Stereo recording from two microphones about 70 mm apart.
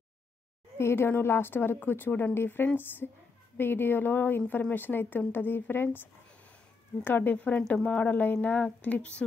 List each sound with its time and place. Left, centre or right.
0.7 s a woman's voice: left
7.1 s speech: left